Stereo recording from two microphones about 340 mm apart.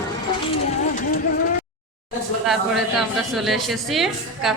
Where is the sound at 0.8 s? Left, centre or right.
Left.